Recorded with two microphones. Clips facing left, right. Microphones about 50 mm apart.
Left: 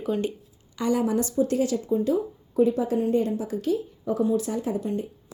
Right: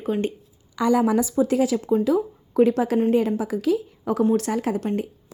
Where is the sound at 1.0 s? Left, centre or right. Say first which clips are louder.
Right 3 dB; right.